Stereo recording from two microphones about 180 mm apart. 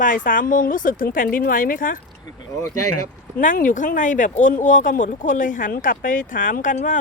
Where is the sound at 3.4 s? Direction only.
45° left (ahead or behind).